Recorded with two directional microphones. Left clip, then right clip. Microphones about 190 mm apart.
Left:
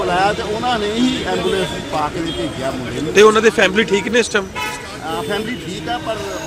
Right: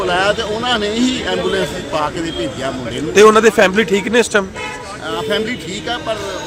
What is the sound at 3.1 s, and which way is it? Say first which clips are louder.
Speech: right 2 dB; 25° right (ahead or behind).